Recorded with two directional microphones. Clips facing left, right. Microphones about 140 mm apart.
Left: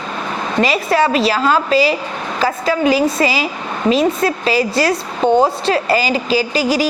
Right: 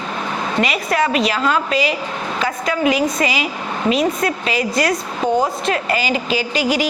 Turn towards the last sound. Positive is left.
turn(degrees=35)  # may be behind; listen again after turning